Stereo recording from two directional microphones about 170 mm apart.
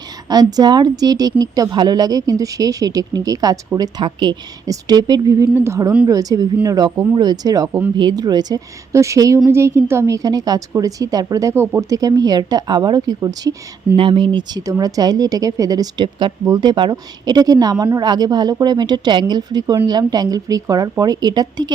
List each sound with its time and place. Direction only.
0.3 s a woman's voice: 25° right (ahead or behind)